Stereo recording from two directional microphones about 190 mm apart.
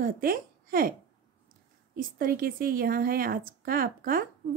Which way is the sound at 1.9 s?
50° right (ahead or behind).